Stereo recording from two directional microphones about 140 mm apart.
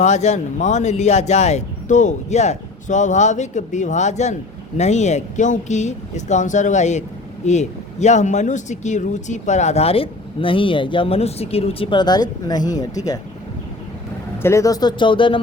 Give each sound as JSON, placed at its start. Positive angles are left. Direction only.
{"t": 0.0, "sound": "speech", "side_deg": 55}
{"t": 14.4, "sound": "speech", "side_deg": 20}